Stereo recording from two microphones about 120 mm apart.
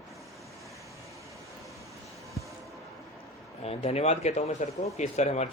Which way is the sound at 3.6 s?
60° left (ahead or behind).